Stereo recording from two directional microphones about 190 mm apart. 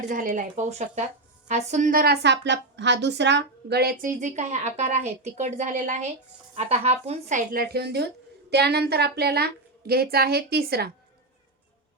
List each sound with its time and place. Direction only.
0.1 s a woman's voice: 45° right (ahead or behind)